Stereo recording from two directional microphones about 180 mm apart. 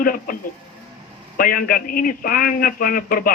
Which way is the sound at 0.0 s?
50° left (ahead or behind).